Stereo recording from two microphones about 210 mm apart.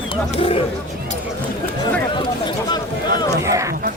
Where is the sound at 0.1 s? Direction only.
25° left (ahead or behind).